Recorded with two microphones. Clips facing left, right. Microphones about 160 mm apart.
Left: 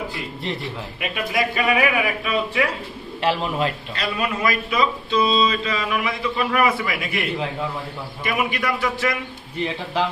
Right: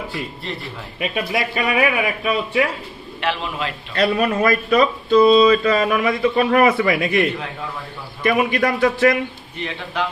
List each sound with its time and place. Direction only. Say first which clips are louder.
0.9 s speech: right 3 dB; 30° right (ahead or behind)
3.3 s a man's voice: left 2 dB; 45° left (ahead or behind)
4.0 s speech: right 6 dB; 50° right (ahead or behind)
8.3 s speech: right 6 dB; 50° right (ahead or behind)